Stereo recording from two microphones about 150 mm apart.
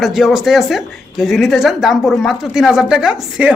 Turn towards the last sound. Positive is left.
turn(degrees=-5)  # may be behind; listen again after turning